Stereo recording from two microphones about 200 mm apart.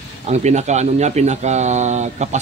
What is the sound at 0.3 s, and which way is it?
Speech, 35° right (ahead or behind).